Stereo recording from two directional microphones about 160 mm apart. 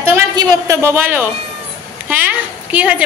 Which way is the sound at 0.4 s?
20° right (ahead or behind).